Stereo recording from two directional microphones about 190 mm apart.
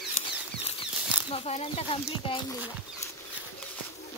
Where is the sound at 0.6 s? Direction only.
30° left (ahead or behind).